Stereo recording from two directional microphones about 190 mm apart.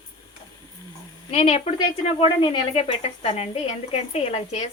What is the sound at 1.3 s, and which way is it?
Speech, 35° left (ahead or behind).